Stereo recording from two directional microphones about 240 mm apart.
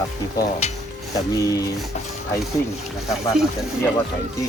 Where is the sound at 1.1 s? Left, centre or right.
Centre.